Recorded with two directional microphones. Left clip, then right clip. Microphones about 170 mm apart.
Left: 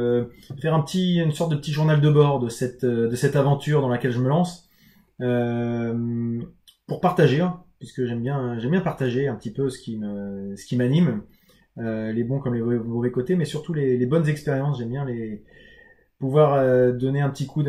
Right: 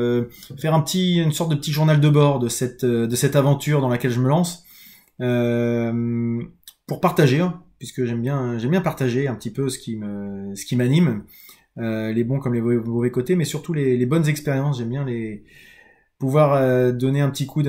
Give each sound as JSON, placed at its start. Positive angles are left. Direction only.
{"t": 0.0, "sound": "speech", "side_deg": -15}
{"t": 7.0, "sound": "speech", "side_deg": -15}
{"t": 16.2, "sound": "speech", "side_deg": -20}